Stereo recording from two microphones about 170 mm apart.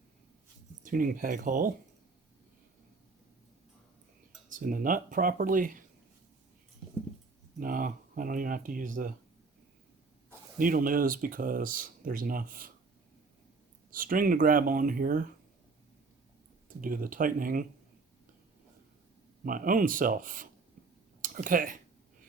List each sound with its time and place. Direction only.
0.8 s speech: 50° right (ahead or behind)
4.5 s speech: 55° right (ahead or behind)
7.6 s speech: 55° right (ahead or behind)
10.6 s speech: 55° right (ahead or behind)
13.9 s speech: 55° right (ahead or behind)
16.6 s speech: 55° right (ahead or behind)
19.5 s speech: 55° right (ahead or behind)